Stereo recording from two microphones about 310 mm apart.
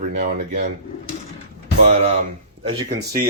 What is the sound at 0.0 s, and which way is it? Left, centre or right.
Speech, right.